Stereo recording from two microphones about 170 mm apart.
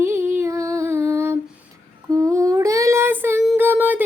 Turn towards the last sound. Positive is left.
turn(degrees=-10)  # may be behind; listen again after turning